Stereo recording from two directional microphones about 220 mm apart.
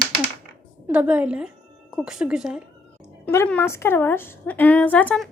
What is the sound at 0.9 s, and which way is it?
A woman's voice, 5° right (ahead or behind).